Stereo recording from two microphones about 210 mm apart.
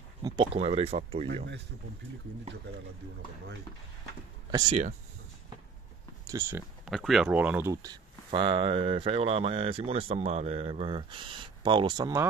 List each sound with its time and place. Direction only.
0.2 s speech: 25° right (ahead or behind)
1.2 s speech: 55° right (ahead or behind)
4.5 s speech: 20° right (ahead or behind)
6.2 s speech: 10° right (ahead or behind)
6.9 s speech: centre (ahead or behind); by 12.3 s 15° right (ahead or behind)